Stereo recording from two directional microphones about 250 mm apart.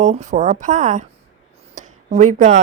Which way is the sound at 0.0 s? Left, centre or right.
Right.